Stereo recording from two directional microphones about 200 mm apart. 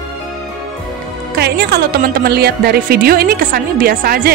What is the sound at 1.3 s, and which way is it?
Speech, 55° right (ahead or behind).